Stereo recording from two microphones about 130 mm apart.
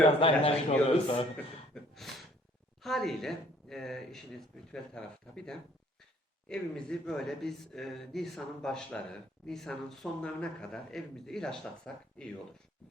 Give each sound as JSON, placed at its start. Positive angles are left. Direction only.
{"t": 0.2, "sound": "a man's voice", "side_deg": 40}
{"t": 1.7, "sound": "gasp", "side_deg": 0}
{"t": 2.8, "sound": "speech", "side_deg": 0}